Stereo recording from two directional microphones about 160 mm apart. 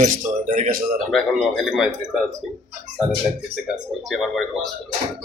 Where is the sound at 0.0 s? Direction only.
50° right (ahead or behind).